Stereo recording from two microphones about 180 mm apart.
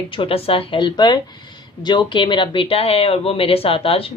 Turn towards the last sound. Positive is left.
turn(degrees=30)  # may be behind; listen again after turning